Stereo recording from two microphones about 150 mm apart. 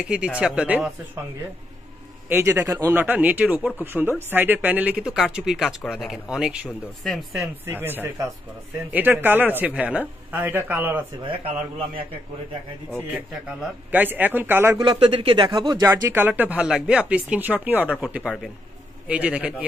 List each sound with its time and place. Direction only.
0.0 s speech: 5° right (ahead or behind)
2.2 s speech: 15° right (ahead or behind)
7.6 s speech: 15° right (ahead or behind)
13.6 s speech: 10° right (ahead or behind)
14.8 s speech: 35° right (ahead or behind)
15.9 s speech: 15° right (ahead or behind)